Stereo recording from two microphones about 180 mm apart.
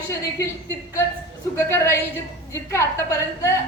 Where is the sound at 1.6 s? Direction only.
15° left (ahead or behind).